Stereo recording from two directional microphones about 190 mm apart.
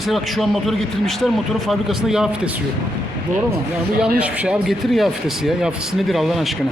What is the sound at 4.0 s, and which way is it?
A man's voice, 5° right (ahead or behind).